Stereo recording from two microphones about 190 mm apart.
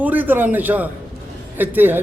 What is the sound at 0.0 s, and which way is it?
Speech, 10° right (ahead or behind).